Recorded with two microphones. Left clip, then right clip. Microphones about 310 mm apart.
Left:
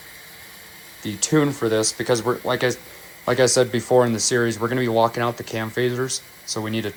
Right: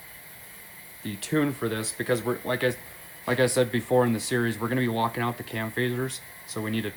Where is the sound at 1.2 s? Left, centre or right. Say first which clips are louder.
Left 7 dB; centre.